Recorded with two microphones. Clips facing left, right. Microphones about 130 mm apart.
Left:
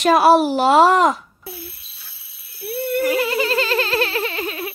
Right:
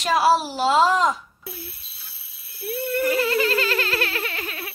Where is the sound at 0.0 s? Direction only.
60° left (ahead or behind).